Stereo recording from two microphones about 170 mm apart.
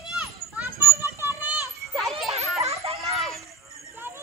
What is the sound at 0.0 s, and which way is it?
Children playing, 5° right (ahead or behind).